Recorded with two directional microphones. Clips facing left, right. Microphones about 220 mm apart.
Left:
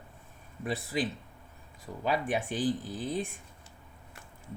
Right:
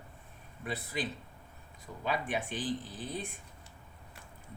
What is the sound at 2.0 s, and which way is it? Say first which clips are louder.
Speech: left 4 dB; 45° left (ahead or behind).